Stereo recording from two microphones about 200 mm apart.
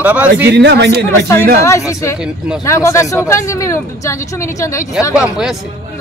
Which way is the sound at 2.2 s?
5° right (ahead or behind).